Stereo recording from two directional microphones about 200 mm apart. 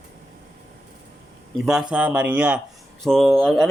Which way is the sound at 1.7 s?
5° right (ahead or behind).